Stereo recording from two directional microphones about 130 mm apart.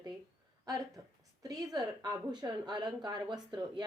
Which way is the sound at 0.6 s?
30° right (ahead or behind).